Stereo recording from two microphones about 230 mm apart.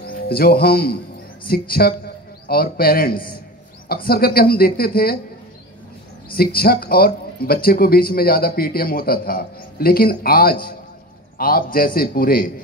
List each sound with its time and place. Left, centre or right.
0.0 s speech: left
6.3 s speech: left